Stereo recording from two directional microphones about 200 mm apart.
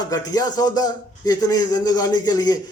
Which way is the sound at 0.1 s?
20° left (ahead or behind).